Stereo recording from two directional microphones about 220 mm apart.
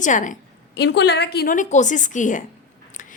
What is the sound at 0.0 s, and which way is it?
Speech, 35° left (ahead or behind).